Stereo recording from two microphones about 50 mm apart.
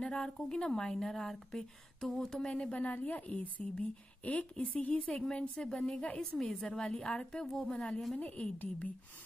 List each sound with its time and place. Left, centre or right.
0.0 s a woman's voice: centre
8.2 s a woman's voice: left